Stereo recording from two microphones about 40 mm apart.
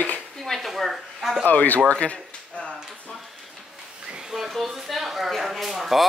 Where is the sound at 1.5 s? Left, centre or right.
Left.